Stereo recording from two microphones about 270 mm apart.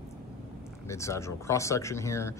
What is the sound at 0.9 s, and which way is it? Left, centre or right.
Speech, centre.